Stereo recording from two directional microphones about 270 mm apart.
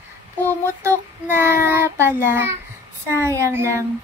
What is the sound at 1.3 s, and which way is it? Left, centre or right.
Child singing, centre.